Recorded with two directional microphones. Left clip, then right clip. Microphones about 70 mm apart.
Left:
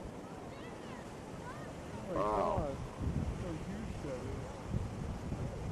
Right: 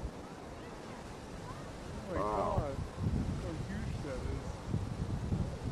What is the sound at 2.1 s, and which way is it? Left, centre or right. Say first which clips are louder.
Vehicle: left 1 dB; centre.